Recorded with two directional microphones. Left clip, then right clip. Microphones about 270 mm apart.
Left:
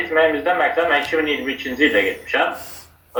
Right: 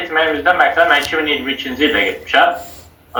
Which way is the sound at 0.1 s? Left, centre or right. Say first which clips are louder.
Right 3 dB; right.